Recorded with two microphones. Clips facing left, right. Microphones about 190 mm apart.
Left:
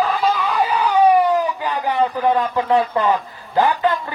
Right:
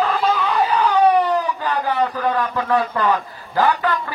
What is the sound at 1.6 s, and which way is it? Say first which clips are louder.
A man's voice: left 1 dB; 15° left (ahead or behind).